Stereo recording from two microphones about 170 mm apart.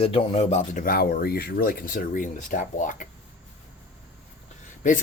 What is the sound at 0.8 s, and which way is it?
Speech, 60° left (ahead or behind).